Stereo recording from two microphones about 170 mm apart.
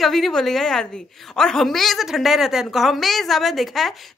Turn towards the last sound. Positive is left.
turn(degrees=0)  # may be behind; listen again after turning